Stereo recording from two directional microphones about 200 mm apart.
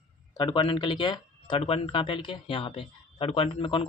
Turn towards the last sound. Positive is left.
turn(degrees=25)  # may be behind; listen again after turning